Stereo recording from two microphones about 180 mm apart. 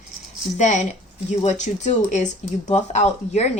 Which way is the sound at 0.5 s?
40° left (ahead or behind).